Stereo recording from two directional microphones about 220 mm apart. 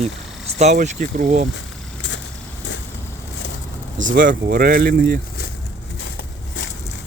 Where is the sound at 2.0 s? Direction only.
55° left (ahead or behind).